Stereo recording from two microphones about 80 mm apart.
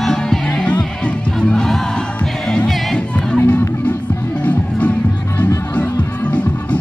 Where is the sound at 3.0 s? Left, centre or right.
Centre.